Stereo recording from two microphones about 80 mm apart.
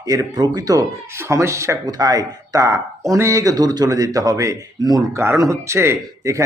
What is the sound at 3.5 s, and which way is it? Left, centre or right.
Speech, right.